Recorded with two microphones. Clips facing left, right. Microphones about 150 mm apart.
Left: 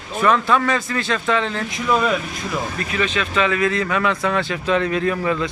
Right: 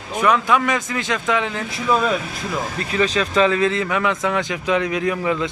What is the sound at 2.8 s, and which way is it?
Speech, 30° right (ahead or behind).